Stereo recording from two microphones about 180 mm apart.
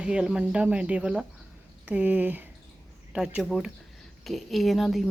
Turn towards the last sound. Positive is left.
turn(degrees=0)  # may be behind; listen again after turning